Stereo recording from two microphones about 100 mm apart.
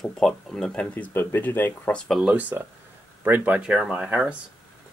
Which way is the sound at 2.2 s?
15° right (ahead or behind).